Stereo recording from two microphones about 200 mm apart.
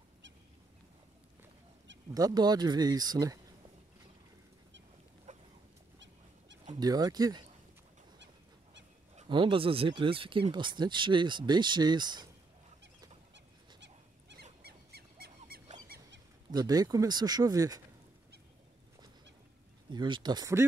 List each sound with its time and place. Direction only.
2.1 s speech: 20° right (ahead or behind)
5.3 s a sound: 35° right (ahead or behind)
6.8 s speech: 20° right (ahead or behind)
9.1 s speech: 25° right (ahead or behind)
13.3 s dog: 60° right (ahead or behind)
16.5 s speech: 20° right (ahead or behind)
19.9 s speech: 25° right (ahead or behind)